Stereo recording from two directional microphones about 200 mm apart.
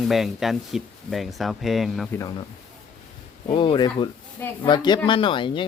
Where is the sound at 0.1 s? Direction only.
Centre (ahead or behind).